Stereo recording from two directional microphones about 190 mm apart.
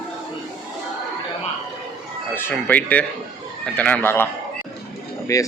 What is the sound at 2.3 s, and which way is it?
Speech, 10° left (ahead or behind).